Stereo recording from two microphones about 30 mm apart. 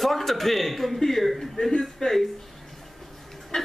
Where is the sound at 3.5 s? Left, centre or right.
Left.